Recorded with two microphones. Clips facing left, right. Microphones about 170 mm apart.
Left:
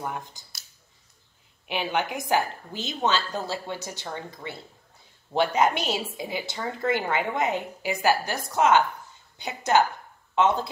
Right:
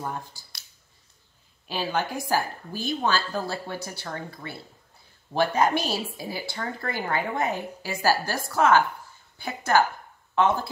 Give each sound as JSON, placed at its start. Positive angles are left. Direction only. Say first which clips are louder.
{"t": 0.1, "sound": "speech", "louder": "even", "side_deg": 20}
{"t": 1.7, "sound": "a woman's voice", "louder": "even", "side_deg": 20}